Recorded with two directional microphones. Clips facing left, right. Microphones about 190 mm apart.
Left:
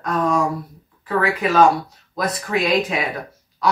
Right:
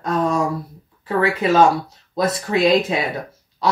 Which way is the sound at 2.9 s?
30° right (ahead or behind).